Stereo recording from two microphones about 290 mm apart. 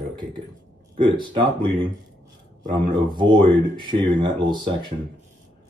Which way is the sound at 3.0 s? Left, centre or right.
Centre.